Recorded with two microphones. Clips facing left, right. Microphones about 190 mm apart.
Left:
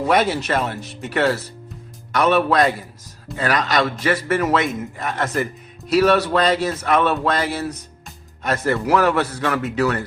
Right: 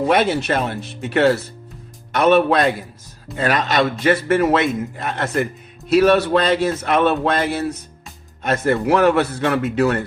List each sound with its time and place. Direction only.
0.1 s speech: 25° right (ahead or behind)